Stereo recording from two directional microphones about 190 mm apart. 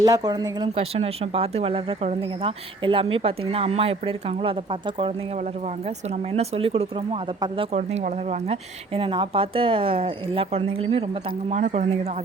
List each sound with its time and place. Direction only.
0.0 s speech: 20° right (ahead or behind)
6.3 s speech: 35° right (ahead or behind)
7.8 s speech: 40° right (ahead or behind)